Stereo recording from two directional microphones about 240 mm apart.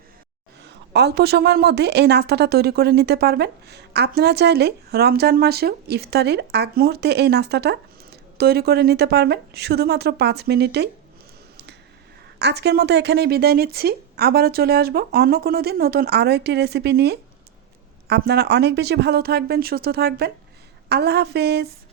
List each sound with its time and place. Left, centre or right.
0.6 s a woman's voice: right
12.4 s a woman's voice: right